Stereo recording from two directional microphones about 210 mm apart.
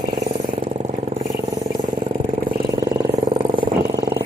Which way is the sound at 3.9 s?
50° right (ahead or behind).